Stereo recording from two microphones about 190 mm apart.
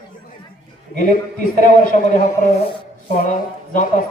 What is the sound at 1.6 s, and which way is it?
Speech, 45° left (ahead or behind).